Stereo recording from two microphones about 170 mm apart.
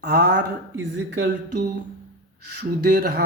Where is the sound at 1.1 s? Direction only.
85° right.